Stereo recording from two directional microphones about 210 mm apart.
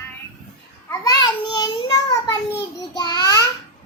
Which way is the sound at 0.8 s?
15° left (ahead or behind).